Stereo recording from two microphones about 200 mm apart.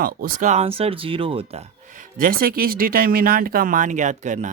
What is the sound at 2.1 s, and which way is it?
Speech, 45° right (ahead or behind).